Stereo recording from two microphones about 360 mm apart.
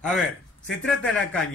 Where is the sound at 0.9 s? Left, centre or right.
Centre.